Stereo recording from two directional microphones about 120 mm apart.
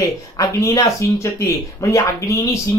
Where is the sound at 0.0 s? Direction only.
25° left (ahead or behind).